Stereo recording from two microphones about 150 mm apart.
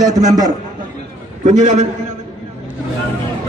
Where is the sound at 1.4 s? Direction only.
50° right (ahead or behind).